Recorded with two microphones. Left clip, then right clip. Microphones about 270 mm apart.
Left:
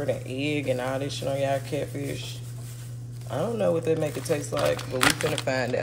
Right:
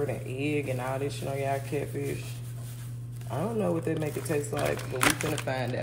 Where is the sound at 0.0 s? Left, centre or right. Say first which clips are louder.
Left 3 dB; left.